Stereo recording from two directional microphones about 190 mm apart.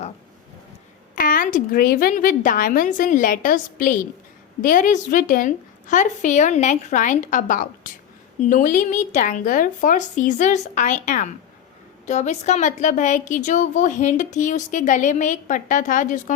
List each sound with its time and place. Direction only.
1.1 s a woman's voice: 45° left (ahead or behind)